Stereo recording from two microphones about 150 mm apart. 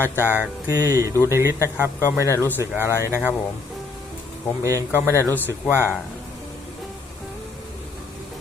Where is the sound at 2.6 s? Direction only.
15° right (ahead or behind).